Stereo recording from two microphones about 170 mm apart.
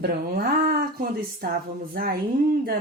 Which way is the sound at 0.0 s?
65° right (ahead or behind).